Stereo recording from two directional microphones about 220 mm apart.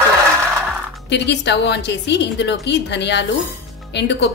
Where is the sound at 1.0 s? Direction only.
50° left (ahead or behind).